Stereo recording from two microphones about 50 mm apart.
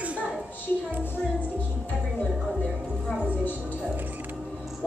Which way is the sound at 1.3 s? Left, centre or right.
Right.